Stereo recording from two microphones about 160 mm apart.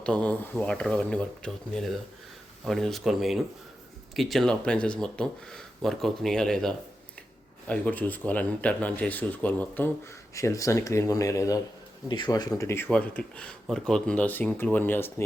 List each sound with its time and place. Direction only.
0.0 s speech: 5° left (ahead or behind)